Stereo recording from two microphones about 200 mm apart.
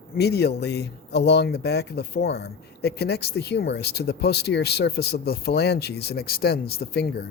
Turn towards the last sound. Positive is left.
turn(degrees=50)  # may be behind; listen again after turning